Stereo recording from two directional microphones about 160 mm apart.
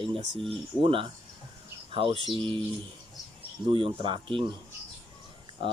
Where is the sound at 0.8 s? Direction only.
35° right (ahead or behind).